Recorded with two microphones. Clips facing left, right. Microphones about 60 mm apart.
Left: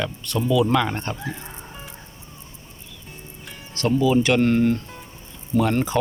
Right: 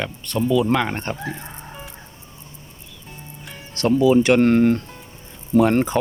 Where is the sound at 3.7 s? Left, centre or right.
Right.